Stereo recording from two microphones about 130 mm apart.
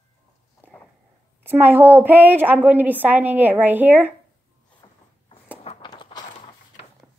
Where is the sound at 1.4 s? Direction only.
15° right (ahead or behind).